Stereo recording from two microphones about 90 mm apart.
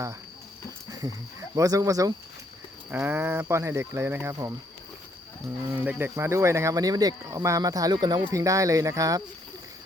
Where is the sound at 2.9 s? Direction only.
25° right (ahead or behind).